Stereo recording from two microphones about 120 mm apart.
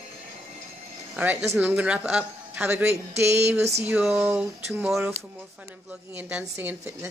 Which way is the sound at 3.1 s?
20° right (ahead or behind).